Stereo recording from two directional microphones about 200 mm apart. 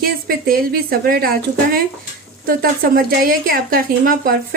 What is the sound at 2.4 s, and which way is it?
A woman's voice, 50° right (ahead or behind).